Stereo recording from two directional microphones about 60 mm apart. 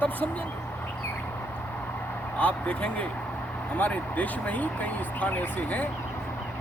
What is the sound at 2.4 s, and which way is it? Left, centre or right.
Speech, left.